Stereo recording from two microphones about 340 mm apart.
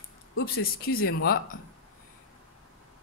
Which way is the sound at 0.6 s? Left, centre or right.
Left.